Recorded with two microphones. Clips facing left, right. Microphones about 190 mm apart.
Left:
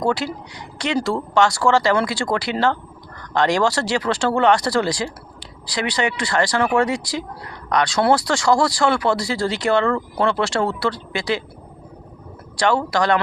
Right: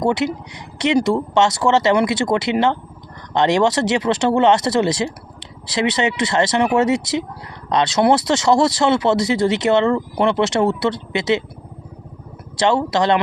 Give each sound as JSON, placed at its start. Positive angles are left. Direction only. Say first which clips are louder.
{"t": 0.0, "sound": "speech", "louder": "right 3 dB", "side_deg": -20}
{"t": 12.5, "sound": "speech", "louder": "right 2 dB", "side_deg": -25}